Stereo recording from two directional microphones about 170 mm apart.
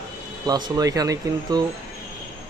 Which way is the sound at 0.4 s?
20° right (ahead or behind).